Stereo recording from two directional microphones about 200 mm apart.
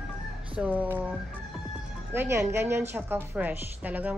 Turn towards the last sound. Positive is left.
turn(degrees=-10)  # may be behind; listen again after turning